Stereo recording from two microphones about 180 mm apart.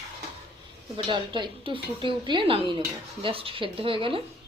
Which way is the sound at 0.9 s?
25° right (ahead or behind).